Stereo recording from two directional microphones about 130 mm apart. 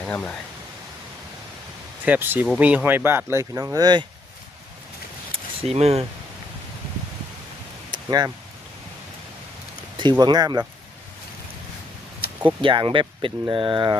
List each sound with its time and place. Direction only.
0.0 s speech: 10° left (ahead or behind)
2.0 s speech: 15° right (ahead or behind); by 4.0 s 30° right (ahead or behind)
5.5 s speech: 55° right (ahead or behind)
7.9 s a sound: 35° right (ahead or behind)
10.0 s speech: 35° right (ahead or behind)
12.6 s speech: 40° right (ahead or behind)